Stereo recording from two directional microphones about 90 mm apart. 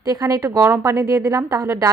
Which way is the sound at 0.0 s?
40° right (ahead or behind).